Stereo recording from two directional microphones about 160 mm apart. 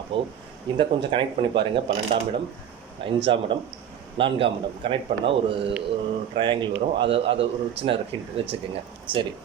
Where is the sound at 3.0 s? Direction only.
35° right (ahead or behind).